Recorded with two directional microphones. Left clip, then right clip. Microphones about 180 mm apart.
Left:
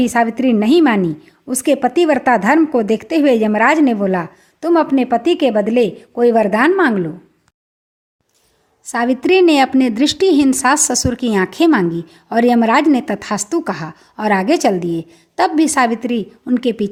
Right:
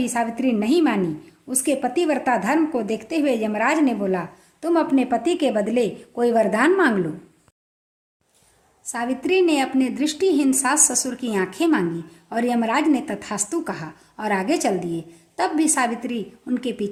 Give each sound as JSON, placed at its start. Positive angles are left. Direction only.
{"t": 0.0, "sound": "a woman's voice", "side_deg": 40}
{"t": 8.8, "sound": "a woman's voice", "side_deg": 45}